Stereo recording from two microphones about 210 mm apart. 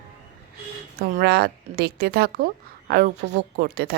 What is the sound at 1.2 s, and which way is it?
Speech, 50° right (ahead or behind).